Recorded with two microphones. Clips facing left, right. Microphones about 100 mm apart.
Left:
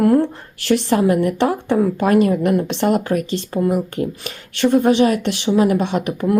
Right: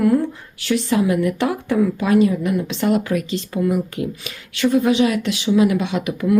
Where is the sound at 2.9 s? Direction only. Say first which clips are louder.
Even; 45° left (ahead or behind).